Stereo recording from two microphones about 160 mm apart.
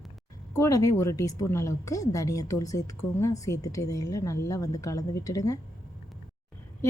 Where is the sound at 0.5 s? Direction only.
20° left (ahead or behind).